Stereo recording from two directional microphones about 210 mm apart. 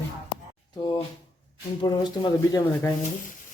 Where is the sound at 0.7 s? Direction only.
20° left (ahead or behind).